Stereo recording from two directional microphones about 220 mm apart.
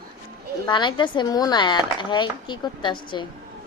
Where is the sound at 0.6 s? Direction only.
20° left (ahead or behind).